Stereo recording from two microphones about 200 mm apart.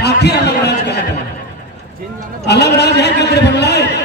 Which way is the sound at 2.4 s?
55° left (ahead or behind).